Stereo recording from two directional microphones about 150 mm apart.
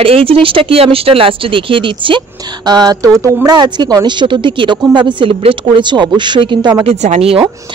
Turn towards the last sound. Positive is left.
turn(degrees=-40)  # may be behind; listen again after turning